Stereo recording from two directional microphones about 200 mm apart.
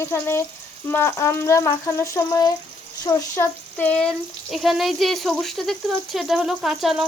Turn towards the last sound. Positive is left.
turn(degrees=0)  # may be behind; listen again after turning